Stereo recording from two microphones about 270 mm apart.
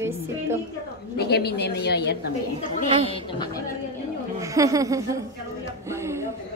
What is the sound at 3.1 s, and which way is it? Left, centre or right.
Speech, centre.